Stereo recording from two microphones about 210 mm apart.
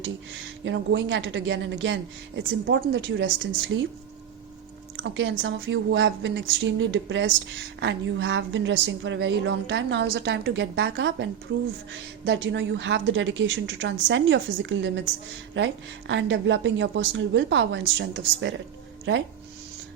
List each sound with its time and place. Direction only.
0.6 s a woman's voice: 60° right (ahead or behind)
4.9 s a woman's voice: 60° right (ahead or behind)